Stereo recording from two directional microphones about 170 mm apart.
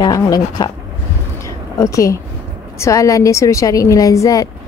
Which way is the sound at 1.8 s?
20° left (ahead or behind).